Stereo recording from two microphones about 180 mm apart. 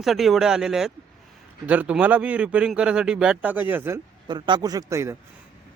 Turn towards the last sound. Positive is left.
turn(degrees=-15)  # may be behind; listen again after turning